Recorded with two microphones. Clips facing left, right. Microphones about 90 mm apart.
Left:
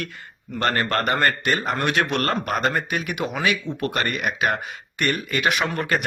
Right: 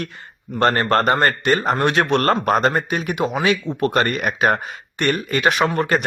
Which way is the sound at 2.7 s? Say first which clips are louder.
Right 4 dB; 30° right (ahead or behind).